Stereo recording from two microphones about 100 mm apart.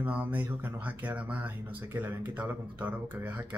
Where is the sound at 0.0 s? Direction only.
15° right (ahead or behind).